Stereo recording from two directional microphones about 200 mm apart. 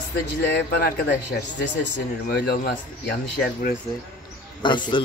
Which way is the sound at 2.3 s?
55° left (ahead or behind).